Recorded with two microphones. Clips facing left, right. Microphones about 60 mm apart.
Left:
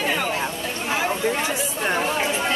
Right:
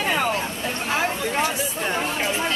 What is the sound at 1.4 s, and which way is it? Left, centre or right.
Speech, centre.